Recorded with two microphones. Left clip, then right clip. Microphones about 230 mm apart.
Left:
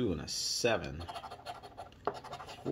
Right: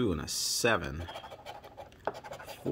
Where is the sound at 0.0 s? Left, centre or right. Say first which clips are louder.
Right 3 dB; right.